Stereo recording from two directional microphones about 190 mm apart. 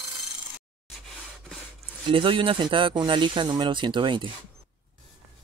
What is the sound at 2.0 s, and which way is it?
Speech, 25° right (ahead or behind).